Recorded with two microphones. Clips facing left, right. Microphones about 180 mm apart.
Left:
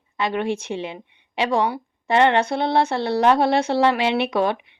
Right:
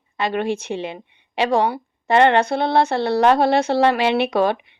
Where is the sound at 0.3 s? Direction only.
45° right (ahead or behind).